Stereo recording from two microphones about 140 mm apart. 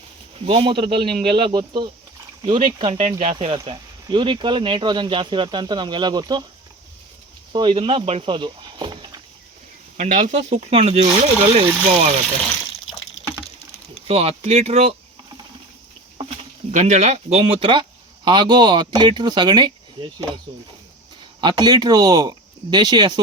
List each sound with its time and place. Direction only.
0.4 s speech: 40° right (ahead or behind)
3.0 s speech: 50° right (ahead or behind)
3.3 s speech: 40° right (ahead or behind)
7.5 s speech: 35° right (ahead or behind)
10.0 s speech: 60° right (ahead or behind)
12.2 s speech: 5° left (ahead or behind)
14.1 s speech: 45° right (ahead or behind)
16.7 s speech: 55° right (ahead or behind); by 20.4 s 35° right (ahead or behind)
21.4 s speech: 30° right (ahead or behind)